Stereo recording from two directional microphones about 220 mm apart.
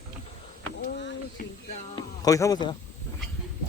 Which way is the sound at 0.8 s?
50° left (ahead or behind).